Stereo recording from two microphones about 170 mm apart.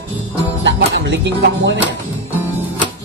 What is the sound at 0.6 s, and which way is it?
Music, 90° right.